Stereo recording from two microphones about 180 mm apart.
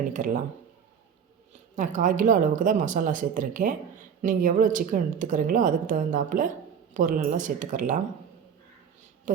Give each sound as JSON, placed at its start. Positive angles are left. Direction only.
{"t": 0.0, "sound": "a woman's voice", "side_deg": -50}
{"t": 1.7, "sound": "a woman's voice", "side_deg": -45}